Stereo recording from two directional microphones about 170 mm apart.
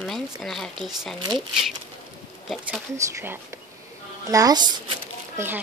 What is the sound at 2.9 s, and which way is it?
Speech, 10° right (ahead or behind).